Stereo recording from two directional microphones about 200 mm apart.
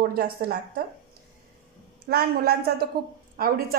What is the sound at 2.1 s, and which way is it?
Speech, 50° right (ahead or behind).